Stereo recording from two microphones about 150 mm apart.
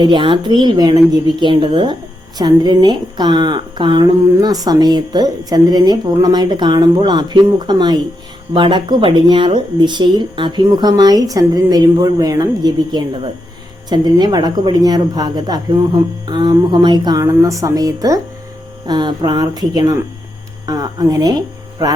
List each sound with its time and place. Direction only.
0.0 s a woman's voice: 30° right (ahead or behind)